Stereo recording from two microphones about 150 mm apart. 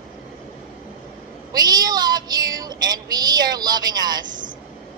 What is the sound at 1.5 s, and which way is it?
Child singing, 25° right (ahead or behind).